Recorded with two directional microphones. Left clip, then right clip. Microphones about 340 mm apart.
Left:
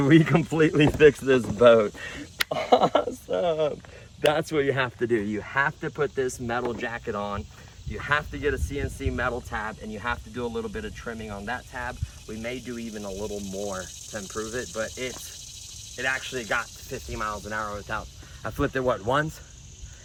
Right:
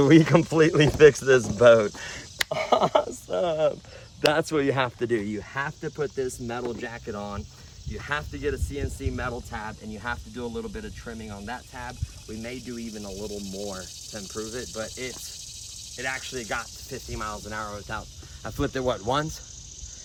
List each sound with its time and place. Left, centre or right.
0.0 s speech: centre